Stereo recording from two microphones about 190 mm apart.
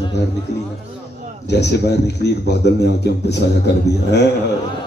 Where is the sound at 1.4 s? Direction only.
65° left (ahead or behind).